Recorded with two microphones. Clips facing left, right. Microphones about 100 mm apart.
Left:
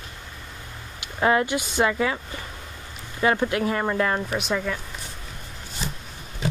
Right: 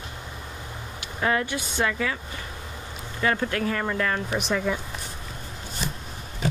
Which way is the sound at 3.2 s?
15° left (ahead or behind).